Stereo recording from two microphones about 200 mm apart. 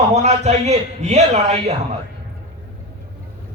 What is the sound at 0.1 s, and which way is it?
A man's voice, 35° right (ahead or behind).